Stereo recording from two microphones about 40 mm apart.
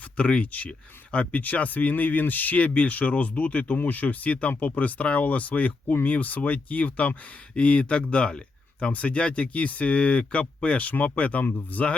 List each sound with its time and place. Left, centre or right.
0.2 s speech: left
2.6 s speech: left
11.4 s speech: left